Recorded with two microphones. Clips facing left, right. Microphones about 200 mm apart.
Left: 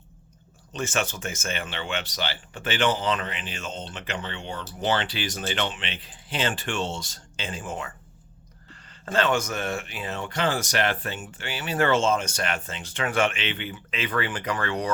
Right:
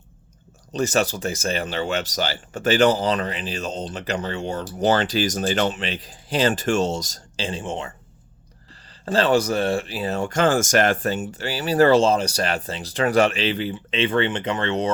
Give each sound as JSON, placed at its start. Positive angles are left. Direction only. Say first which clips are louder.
{"t": 0.7, "sound": "speech", "louder": "right 7 dB", "side_deg": -35}
{"t": 9.0, "sound": "speech", "louder": "right 5 dB", "side_deg": -35}